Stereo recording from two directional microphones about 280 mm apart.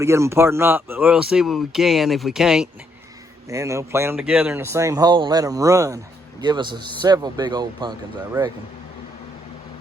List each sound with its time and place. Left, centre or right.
0.0 s speech: centre